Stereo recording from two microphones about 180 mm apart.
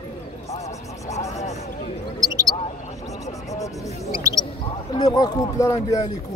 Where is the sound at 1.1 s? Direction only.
40° left (ahead or behind).